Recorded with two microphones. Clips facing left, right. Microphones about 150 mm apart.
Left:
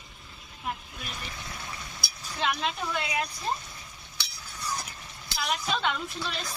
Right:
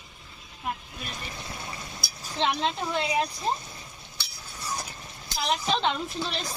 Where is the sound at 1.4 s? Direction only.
30° right (ahead or behind).